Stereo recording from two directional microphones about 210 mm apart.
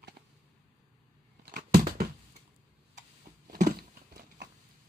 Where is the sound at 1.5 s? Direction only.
45° right (ahead or behind).